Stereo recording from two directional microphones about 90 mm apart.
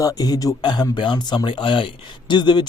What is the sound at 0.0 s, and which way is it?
Speech, 45° left (ahead or behind).